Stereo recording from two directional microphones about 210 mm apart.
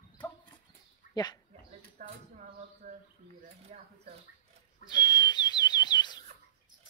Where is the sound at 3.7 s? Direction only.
30° right (ahead or behind).